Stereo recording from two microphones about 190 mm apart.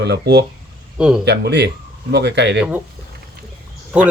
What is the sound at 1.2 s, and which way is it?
Speech, 60° right (ahead or behind).